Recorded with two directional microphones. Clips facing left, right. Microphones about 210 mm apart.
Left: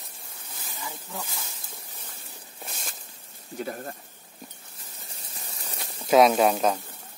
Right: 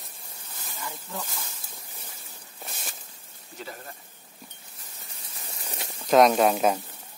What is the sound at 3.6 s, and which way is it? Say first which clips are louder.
Speech: left 7 dB; 45° left (ahead or behind).